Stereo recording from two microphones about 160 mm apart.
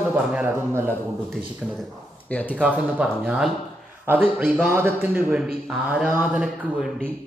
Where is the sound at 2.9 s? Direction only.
5° right (ahead or behind).